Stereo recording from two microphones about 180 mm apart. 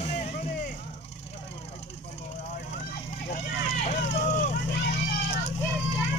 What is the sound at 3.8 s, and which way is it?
Vehicle, 40° left (ahead or behind).